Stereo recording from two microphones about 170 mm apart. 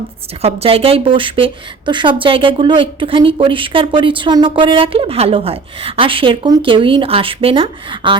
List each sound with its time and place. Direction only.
0.4 s speech: 35° right (ahead or behind)